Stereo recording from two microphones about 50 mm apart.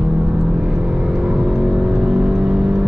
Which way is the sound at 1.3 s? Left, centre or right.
Centre.